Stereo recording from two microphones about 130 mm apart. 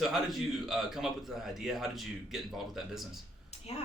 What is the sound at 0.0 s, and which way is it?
A man's voice, centre (ahead or behind).